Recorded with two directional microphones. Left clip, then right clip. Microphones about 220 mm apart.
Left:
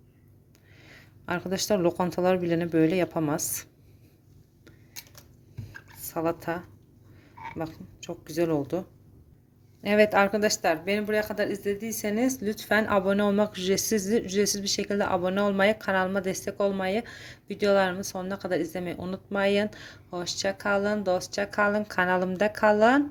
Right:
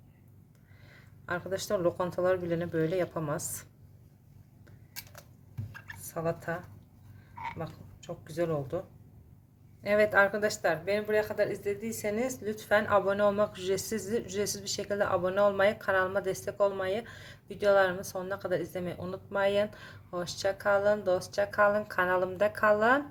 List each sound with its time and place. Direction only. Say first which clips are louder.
0.9 s speech: left 4 dB; 40° left (ahead or behind)
6.0 s speech: left 5 dB; 40° left (ahead or behind)
7.6 s speech: left 6 dB; 40° left (ahead or behind)
9.8 s speech: left 3 dB; 30° left (ahead or behind)